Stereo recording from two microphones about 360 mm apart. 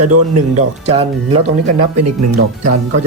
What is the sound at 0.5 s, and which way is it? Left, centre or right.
Speech, centre.